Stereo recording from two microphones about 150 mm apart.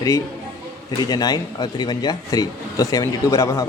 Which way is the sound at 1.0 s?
25° left (ahead or behind).